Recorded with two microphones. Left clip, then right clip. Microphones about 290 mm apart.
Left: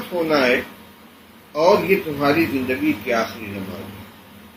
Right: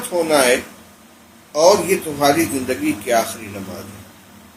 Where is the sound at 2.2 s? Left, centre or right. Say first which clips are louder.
Right 2 dB; right.